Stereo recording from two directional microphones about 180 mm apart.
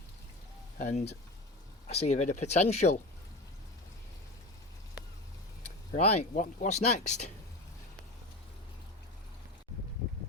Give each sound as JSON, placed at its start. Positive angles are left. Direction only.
{"t": 0.8, "sound": "speech", "side_deg": 40}
{"t": 6.0, "sound": "speech", "side_deg": 40}